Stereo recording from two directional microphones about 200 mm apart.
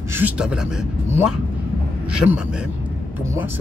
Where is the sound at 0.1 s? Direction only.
5° right (ahead or behind).